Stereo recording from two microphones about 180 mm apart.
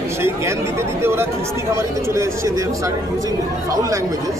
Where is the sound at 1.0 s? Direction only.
15° right (ahead or behind).